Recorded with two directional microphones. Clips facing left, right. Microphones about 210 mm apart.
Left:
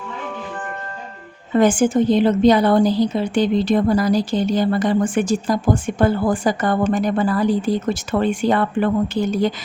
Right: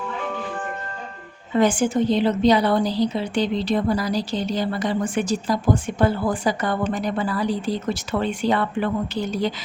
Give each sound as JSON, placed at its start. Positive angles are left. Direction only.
{"t": 1.5, "sound": "a woman's voice", "side_deg": 50}